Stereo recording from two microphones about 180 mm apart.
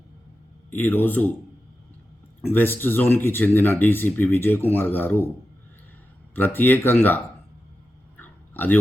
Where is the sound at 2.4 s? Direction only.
10° left (ahead or behind).